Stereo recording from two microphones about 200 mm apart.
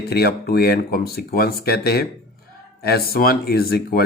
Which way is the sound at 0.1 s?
55° left (ahead or behind).